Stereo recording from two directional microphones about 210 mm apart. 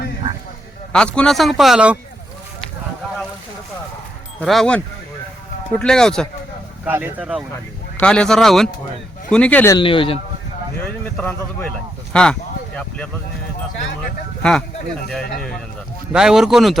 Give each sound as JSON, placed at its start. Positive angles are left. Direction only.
{"t": 0.9, "sound": "speech", "side_deg": 5}
{"t": 4.4, "sound": "speech", "side_deg": 0}
{"t": 5.8, "sound": "speech", "side_deg": 5}
{"t": 6.8, "sound": "speech", "side_deg": -10}
{"t": 7.5, "sound": "speech", "side_deg": 5}
{"t": 9.7, "sound": "speech", "side_deg": 25}
{"t": 10.8, "sound": "speech", "side_deg": 5}
{"t": 15.4, "sound": "speech", "side_deg": 5}